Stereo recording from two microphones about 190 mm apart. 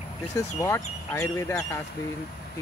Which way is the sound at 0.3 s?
15° left (ahead or behind).